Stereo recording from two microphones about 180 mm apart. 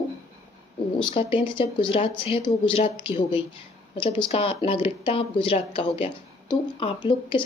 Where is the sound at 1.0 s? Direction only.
30° left (ahead or behind).